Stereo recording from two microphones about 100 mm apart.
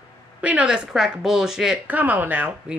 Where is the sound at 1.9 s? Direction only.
15° right (ahead or behind).